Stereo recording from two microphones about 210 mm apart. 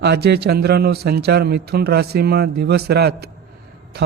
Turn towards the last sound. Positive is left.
turn(degrees=-50)  # may be behind; listen again after turning